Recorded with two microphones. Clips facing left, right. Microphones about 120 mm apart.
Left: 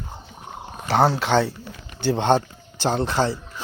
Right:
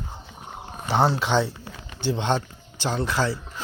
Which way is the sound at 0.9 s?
90° left.